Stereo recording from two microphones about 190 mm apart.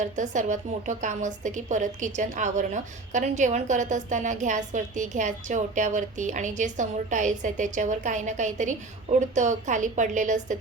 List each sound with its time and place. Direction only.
0.0 s a woman's voice: 40° right (ahead or behind)